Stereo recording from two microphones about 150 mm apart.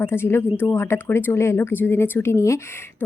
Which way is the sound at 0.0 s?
15° left (ahead or behind).